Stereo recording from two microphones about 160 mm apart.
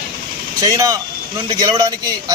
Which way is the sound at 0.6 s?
20° right (ahead or behind).